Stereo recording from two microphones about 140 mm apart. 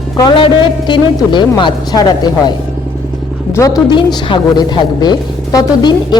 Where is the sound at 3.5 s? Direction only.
25° left (ahead or behind).